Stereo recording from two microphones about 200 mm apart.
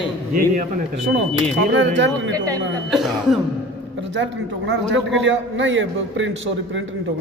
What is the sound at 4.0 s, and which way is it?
A man's voice, 65° right (ahead or behind).